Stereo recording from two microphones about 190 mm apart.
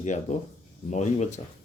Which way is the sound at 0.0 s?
40° left (ahead or behind).